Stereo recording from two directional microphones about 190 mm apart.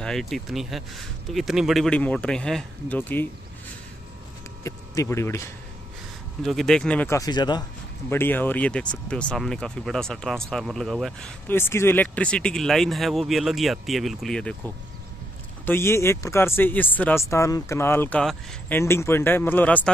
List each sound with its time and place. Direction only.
0.0 s speech: centre (ahead or behind)
4.6 s speech: 15° left (ahead or behind)
6.4 s speech: centre (ahead or behind)
7.2 s speech: 20° left (ahead or behind)
8.1 s speech: 10° left (ahead or behind)
15.6 s speech: 10° left (ahead or behind)